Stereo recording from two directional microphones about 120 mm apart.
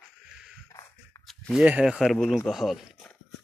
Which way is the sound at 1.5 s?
10° right (ahead or behind).